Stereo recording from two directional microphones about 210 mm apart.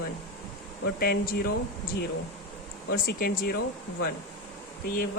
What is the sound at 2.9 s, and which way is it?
Speech, 45° left (ahead or behind).